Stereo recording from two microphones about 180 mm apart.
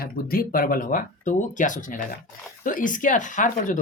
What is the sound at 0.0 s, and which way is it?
Speech, 55° left (ahead or behind).